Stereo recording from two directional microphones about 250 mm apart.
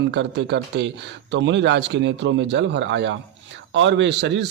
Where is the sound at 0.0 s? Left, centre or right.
Right.